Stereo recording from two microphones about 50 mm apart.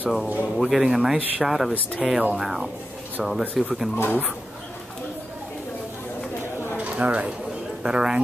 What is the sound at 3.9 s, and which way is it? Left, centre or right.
Speech, left.